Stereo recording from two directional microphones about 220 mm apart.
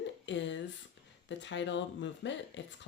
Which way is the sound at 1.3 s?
55° left (ahead or behind).